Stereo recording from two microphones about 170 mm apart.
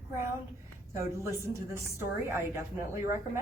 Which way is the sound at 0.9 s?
15° right (ahead or behind).